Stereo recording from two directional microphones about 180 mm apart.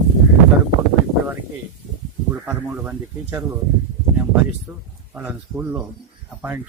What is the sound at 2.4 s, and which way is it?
Speech, 10° right (ahead or behind).